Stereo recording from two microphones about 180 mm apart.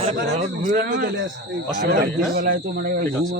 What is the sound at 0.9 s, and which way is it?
Speech, 70° right (ahead or behind).